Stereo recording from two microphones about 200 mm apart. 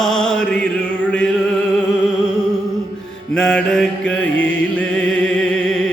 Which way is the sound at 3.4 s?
5° left (ahead or behind).